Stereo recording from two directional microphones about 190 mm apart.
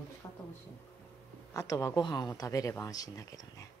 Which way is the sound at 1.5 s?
15° left (ahead or behind).